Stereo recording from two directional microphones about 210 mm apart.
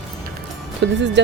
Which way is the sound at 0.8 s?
55° right (ahead or behind).